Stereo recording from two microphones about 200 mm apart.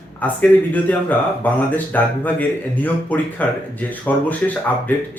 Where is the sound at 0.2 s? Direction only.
10° left (ahead or behind).